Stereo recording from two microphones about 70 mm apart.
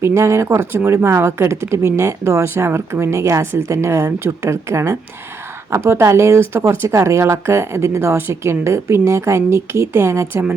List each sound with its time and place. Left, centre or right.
0.0 s speech: right